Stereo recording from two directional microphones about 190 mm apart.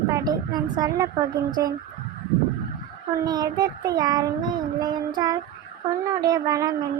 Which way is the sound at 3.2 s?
20° right (ahead or behind).